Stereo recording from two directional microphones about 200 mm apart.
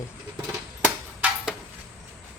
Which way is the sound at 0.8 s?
5° right (ahead or behind).